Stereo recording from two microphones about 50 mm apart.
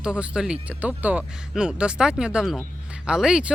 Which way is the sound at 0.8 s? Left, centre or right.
Right.